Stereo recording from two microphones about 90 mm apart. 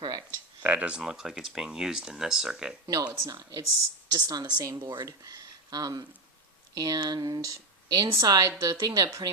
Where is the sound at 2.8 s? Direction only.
45° right (ahead or behind).